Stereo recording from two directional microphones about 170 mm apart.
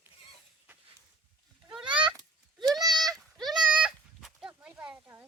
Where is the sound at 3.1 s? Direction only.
Centre (ahead or behind).